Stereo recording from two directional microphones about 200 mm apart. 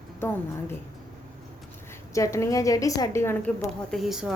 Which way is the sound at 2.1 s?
15° left (ahead or behind).